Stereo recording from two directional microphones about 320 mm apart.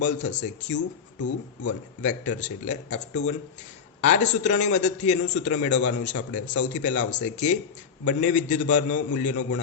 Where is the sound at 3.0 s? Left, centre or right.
Left.